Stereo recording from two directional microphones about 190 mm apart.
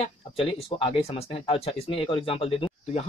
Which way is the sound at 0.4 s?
30° left (ahead or behind).